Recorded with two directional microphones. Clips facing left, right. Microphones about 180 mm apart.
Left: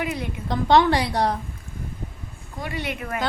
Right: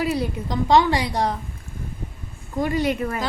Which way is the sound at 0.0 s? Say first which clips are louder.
Right 5 dB; 35° right (ahead or behind).